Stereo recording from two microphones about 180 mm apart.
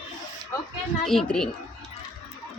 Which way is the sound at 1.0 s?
Centre (ahead or behind).